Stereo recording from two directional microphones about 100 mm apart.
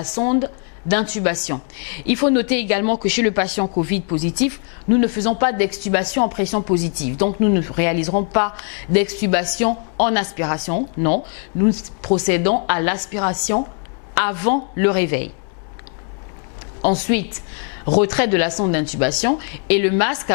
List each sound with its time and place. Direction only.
0.2 s a woman's voice: 15° left (ahead or behind)
16.8 s a woman's voice: 15° left (ahead or behind)